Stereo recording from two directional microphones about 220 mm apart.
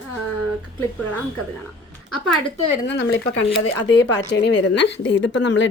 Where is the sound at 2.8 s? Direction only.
55° left (ahead or behind).